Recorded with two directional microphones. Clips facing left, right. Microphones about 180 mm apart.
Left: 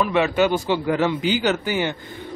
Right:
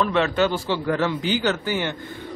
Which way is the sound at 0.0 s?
10° left (ahead or behind).